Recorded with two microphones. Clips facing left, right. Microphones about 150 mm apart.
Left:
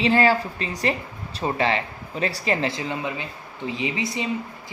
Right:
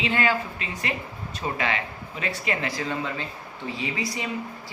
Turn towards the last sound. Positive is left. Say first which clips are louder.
# left 3 dB
turn(degrees=20)  # may be behind; listen again after turning